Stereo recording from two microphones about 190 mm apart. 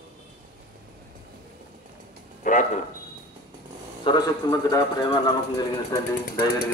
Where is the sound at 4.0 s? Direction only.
20° left (ahead or behind).